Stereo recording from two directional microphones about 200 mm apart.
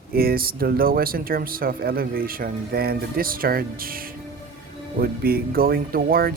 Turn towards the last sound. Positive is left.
turn(degrees=-50)  # may be behind; listen again after turning